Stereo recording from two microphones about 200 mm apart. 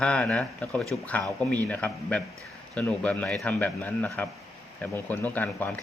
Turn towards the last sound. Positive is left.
turn(degrees=10)  # may be behind; listen again after turning